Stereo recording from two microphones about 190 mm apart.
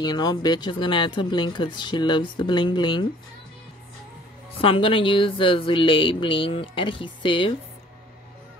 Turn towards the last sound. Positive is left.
turn(degrees=25)  # may be behind; listen again after turning